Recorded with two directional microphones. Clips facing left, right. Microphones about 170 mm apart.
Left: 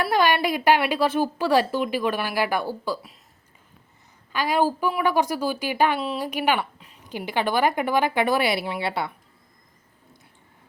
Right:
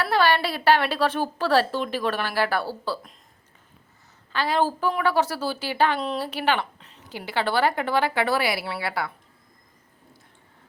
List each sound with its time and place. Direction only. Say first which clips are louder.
0.0 s a woman's voice: left 1 dB; 15° left (ahead or behind)
4.3 s a woman's voice: left 1 dB; 15° left (ahead or behind)